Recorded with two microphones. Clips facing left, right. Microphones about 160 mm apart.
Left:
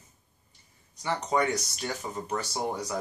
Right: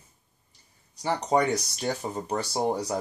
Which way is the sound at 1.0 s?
35° right (ahead or behind).